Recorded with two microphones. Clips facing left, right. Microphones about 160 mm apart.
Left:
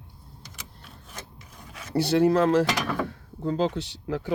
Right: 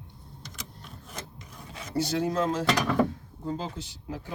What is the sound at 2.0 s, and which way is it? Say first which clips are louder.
Speech: left 7 dB; 65° left (ahead or behind).